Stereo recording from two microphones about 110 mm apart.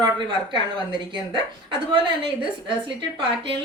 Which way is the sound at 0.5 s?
45° right (ahead or behind).